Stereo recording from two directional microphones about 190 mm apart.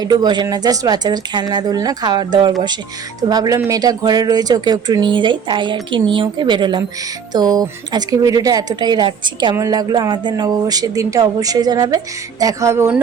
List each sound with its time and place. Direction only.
0.0 s a woman's voice: 20° right (ahead or behind)